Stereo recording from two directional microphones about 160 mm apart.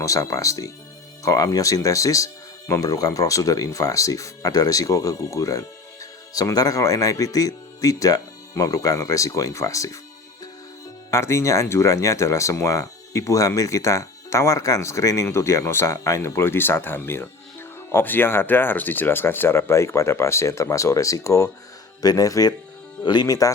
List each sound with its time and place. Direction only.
0.0 s speech: 20° left (ahead or behind)
11.1 s speech: 15° left (ahead or behind)